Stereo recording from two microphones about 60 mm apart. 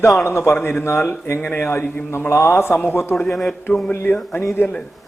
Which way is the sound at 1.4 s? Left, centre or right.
Left.